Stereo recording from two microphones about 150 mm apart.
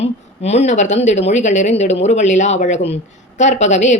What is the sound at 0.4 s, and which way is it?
Speech, 45° left (ahead or behind).